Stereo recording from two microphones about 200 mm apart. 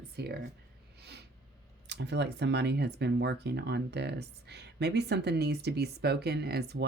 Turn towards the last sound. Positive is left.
turn(degrees=-55)  # may be behind; listen again after turning